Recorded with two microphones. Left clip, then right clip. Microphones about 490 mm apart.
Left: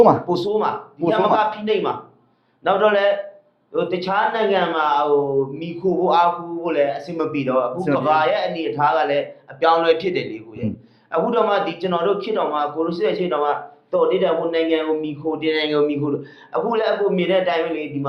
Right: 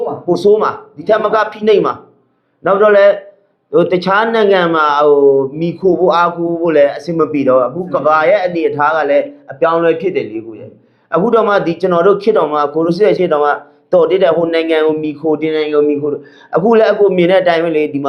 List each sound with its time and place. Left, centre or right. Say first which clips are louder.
0.3 s a man's voice: right 9 dB; right
11.1 s speech: right 7 dB; right
16.5 s speech: right 10 dB; right